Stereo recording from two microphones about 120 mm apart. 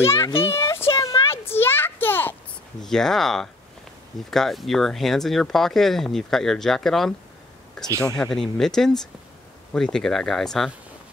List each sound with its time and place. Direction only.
0.0 s speech: 20° left (ahead or behind)
0.5 s a sound: 25° left (ahead or behind)
2.8 s speech: 5° left (ahead or behind)
8.2 s speech: 5° left (ahead or behind)